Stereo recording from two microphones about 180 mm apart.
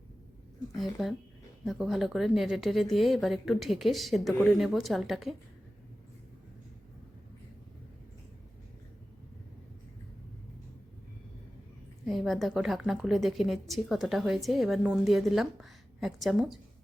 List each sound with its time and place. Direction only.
0.7 s a woman's voice: centre (ahead or behind)
12.0 s a woman's voice: centre (ahead or behind)